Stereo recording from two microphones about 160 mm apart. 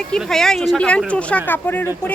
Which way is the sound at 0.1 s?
5° left (ahead or behind).